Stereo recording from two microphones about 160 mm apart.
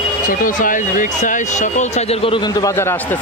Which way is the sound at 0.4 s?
55° left (ahead or behind).